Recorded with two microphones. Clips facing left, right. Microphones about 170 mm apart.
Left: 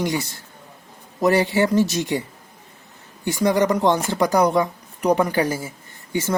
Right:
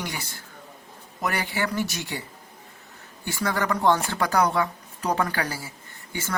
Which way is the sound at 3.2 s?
20° left (ahead or behind).